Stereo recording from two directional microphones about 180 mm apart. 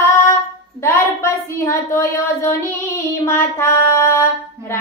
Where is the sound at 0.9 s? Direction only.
15° left (ahead or behind).